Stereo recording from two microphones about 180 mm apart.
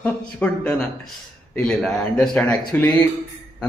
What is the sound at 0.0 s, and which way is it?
A man's voice, 5° left (ahead or behind).